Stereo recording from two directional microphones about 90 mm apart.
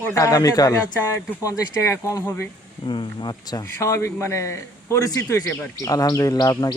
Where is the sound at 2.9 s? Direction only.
55° left (ahead or behind).